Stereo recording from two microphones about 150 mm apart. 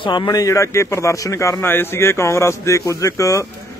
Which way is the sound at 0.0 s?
30° left (ahead or behind).